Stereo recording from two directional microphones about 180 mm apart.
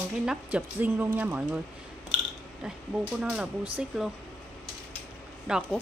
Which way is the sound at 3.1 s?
5° right (ahead or behind).